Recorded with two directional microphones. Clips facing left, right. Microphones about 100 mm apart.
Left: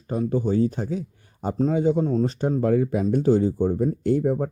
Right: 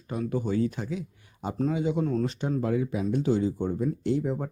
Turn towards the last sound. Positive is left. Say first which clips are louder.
# left 6 dB
turn(degrees=45)  # may be behind; listen again after turning